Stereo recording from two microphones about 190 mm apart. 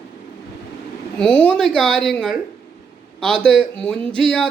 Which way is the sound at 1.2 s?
5° left (ahead or behind).